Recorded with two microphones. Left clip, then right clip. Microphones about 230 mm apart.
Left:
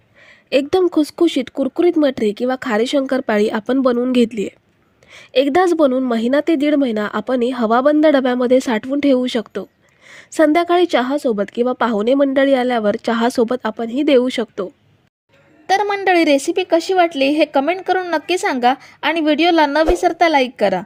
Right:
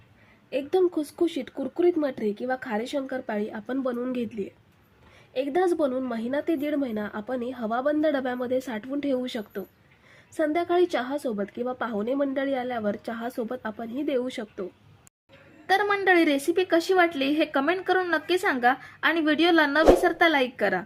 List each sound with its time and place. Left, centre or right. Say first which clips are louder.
0.5 s a woman's voice: left 10 dB; left
15.6 s a woman's voice: left 6 dB; left